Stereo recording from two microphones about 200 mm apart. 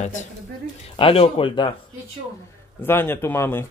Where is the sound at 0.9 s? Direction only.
30° left (ahead or behind).